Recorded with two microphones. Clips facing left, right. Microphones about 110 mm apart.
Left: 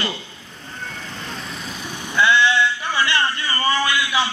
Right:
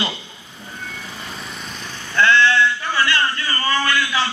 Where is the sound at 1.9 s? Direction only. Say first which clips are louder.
Right 1 dB; 15° left (ahead or behind).